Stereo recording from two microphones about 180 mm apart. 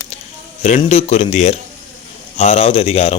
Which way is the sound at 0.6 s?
40° left (ahead or behind).